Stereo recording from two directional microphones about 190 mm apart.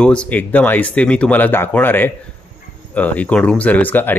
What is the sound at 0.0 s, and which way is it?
Speech, 5° left (ahead or behind).